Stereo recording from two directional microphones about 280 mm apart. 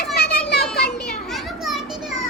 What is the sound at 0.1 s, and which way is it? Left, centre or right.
Children playing, left.